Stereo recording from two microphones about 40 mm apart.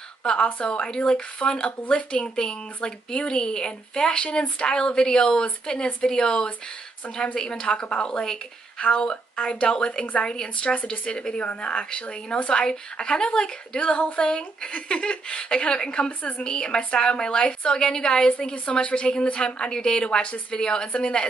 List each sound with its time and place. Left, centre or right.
0.2 s a woman's voice: left
2.2 s a woman's voice: left